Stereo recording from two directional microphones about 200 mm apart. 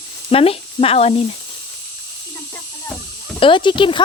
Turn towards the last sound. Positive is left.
turn(degrees=25)  # may be behind; listen again after turning